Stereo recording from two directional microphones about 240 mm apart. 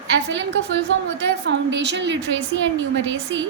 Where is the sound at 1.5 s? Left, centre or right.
Right.